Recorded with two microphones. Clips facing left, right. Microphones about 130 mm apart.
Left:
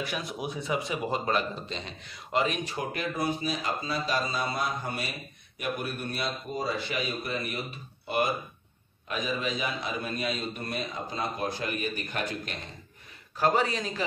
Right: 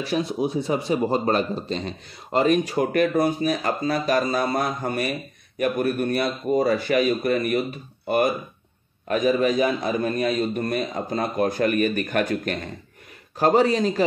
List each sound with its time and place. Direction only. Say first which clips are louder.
0.0 s a man's voice: right 10 dB; 30° right (ahead or behind); by 12.5 s 55° right (ahead or behind)
13.4 s speech: right 8 dB; 40° right (ahead or behind)